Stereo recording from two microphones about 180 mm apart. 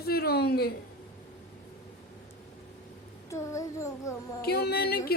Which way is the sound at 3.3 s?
15° left (ahead or behind).